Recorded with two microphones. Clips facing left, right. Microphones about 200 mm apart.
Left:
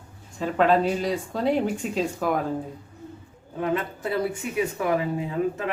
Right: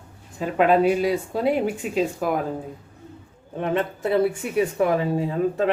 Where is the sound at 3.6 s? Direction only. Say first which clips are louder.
Right 3 dB; 25° right (ahead or behind).